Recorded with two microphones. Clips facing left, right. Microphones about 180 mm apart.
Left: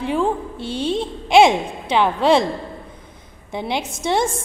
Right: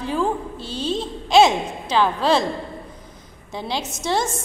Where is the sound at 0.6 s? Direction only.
60° left (ahead or behind).